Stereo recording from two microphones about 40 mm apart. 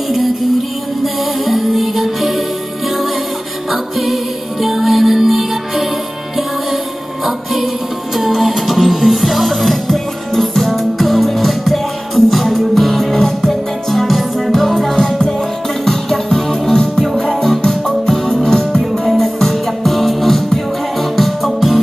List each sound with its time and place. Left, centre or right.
0.1 s music: centre
3.7 s music: centre
8.2 s music: centre
15.0 s music: centre